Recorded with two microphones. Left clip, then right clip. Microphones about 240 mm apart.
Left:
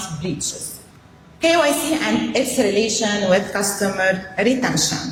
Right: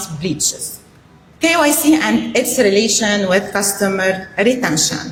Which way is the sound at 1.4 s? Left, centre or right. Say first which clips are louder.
Right 3 dB; right.